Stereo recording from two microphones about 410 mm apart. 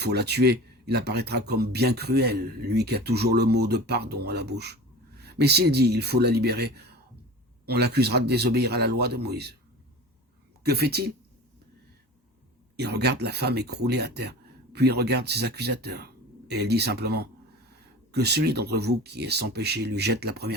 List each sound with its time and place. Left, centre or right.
0.0 s speech: right
10.6 s speech: right
12.7 s speech: right